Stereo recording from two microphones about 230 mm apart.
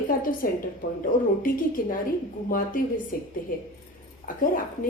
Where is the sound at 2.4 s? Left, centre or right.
Left.